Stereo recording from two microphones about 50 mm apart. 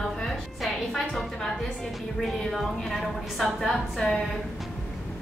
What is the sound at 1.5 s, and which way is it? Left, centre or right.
Music, centre.